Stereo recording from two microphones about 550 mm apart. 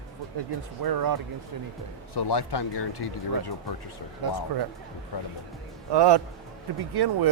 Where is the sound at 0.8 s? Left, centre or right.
Right.